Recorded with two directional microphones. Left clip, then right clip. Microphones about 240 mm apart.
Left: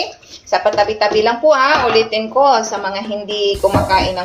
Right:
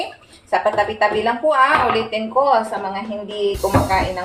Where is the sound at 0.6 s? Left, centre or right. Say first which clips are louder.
Left 3 dB; centre.